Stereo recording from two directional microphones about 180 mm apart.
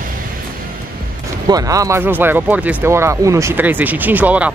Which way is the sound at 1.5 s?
20° right (ahead or behind).